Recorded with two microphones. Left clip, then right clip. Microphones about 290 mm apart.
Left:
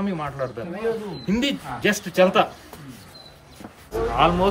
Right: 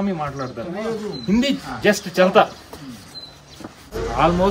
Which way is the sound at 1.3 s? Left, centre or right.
Centre.